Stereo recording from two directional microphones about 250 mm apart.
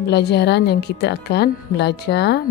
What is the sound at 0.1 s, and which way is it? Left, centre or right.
A woman's voice, left.